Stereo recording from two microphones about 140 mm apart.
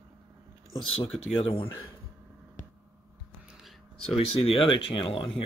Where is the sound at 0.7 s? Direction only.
40° left (ahead or behind).